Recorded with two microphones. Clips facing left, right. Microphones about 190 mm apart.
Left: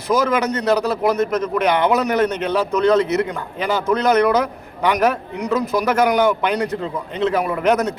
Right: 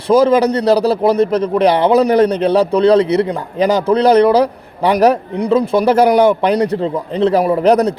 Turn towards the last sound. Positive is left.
turn(degrees=-35)  # may be behind; listen again after turning